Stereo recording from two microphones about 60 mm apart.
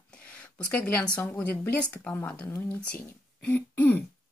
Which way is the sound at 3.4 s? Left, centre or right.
Left.